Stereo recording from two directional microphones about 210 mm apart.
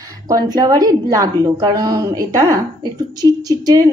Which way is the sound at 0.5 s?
20° right (ahead or behind).